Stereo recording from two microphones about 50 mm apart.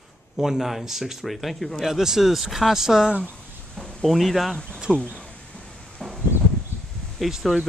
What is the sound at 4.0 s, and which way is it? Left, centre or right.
Speech, centre.